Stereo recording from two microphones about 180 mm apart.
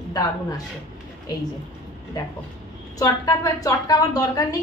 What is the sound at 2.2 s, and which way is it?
A woman's voice, 20° left (ahead or behind).